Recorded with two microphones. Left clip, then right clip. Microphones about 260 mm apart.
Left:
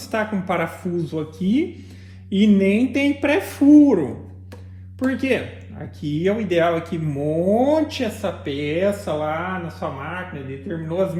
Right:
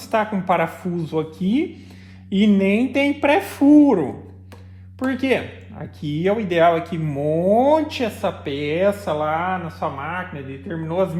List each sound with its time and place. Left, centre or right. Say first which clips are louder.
0.0 s speech: right 3 dB; right